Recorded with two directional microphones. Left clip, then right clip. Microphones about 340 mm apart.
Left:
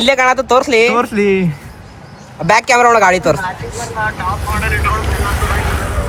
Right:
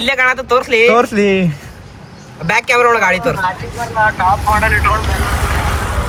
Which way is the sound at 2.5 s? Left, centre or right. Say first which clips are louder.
Left 2 dB; centre.